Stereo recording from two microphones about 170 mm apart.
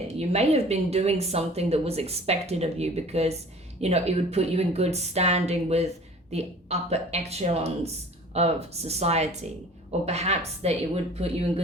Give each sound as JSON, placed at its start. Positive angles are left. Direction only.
{"t": 0.2, "sound": "speech", "side_deg": -40}